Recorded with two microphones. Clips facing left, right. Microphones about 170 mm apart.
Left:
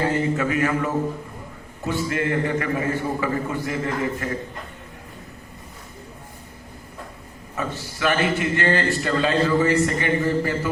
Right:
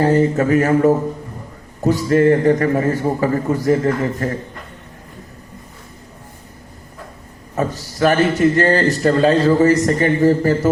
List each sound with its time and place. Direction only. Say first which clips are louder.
0.0 s a man's voice: right 7 dB; 40° right (ahead or behind)
7.5 s a man's voice: right 7 dB; 40° right (ahead or behind)